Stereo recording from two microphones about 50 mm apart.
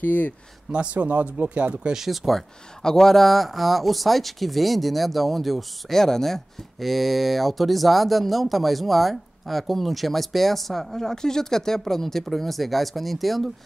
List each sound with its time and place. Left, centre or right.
0.0 s speech: left
0.7 s speech: right
2.0 s speech: centre
2.8 s speech: centre